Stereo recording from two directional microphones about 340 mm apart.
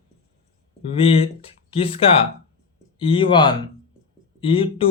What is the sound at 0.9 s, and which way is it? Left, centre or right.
Speech, centre.